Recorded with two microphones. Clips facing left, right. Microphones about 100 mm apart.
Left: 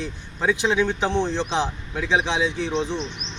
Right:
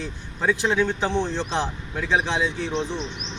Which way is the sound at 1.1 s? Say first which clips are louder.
Left 2 dB; 20° left (ahead or behind).